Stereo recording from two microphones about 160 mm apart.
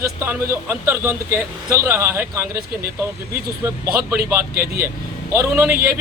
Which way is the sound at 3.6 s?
15° right (ahead or behind).